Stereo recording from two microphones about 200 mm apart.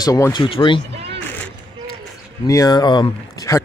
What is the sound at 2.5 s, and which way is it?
Speech, 20° left (ahead or behind).